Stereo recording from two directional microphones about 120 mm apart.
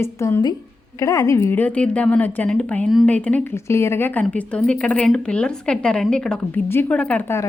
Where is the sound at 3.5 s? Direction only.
20° left (ahead or behind).